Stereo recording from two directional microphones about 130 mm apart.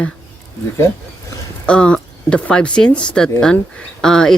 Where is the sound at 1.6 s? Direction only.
10° left (ahead or behind).